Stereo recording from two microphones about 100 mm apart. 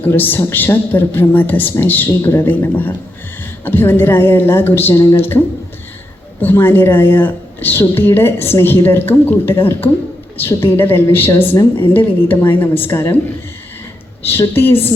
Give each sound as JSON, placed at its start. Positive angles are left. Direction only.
{"t": 0.1, "sound": "a woman's voice", "side_deg": 20}
{"t": 6.4, "sound": "a woman's voice", "side_deg": 20}
{"t": 14.3, "sound": "a woman's voice", "side_deg": 25}